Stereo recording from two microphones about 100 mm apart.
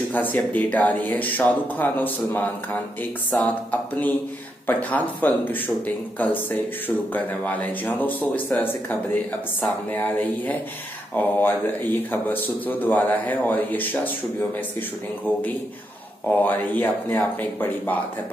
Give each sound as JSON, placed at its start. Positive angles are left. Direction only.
{"t": 0.1, "sound": "speech", "side_deg": 15}
{"t": 4.6, "sound": "speech", "side_deg": 15}